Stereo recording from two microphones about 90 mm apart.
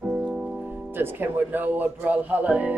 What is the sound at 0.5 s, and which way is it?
Music, 20° right (ahead or behind).